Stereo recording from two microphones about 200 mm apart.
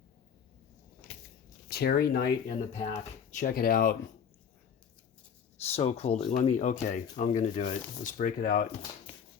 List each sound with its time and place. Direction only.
1.6 s speech: 50° left (ahead or behind)
5.5 s speech: 30° left (ahead or behind)